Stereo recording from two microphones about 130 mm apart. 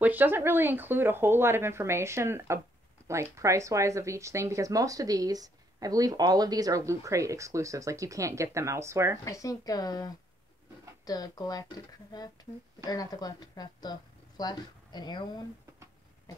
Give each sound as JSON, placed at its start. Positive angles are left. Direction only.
{"t": 0.0, "sound": "speech", "side_deg": -15}
{"t": 9.2, "sound": "speech", "side_deg": 25}